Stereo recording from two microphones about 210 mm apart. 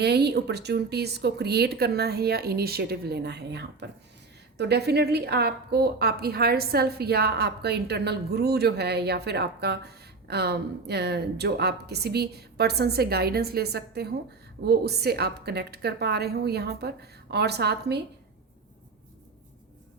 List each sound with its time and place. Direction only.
0.0 s a woman's voice: 50° right (ahead or behind)